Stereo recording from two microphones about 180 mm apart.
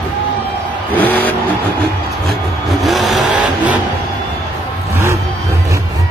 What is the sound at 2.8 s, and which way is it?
Vehicle, centre (ahead or behind).